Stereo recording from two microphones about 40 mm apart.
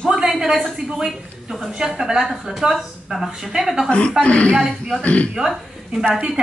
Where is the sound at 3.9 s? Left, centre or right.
Left.